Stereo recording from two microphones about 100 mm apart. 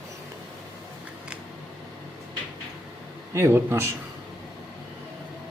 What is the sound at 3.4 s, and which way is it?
Speech, 25° right (ahead or behind).